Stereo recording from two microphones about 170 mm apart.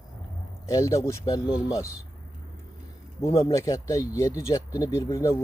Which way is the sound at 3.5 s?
20° left (ahead or behind).